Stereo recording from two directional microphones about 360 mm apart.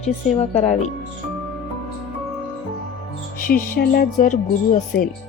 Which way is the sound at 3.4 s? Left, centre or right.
Left.